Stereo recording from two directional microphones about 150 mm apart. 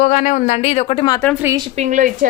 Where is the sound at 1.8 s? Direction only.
55° right (ahead or behind).